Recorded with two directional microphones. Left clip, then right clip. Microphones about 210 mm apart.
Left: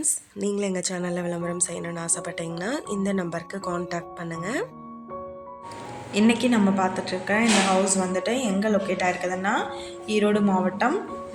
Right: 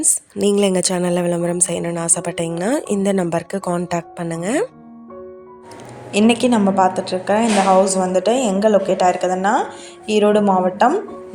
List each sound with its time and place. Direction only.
0.0 s speech: 40° right (ahead or behind)
6.1 s a woman's voice: 25° right (ahead or behind)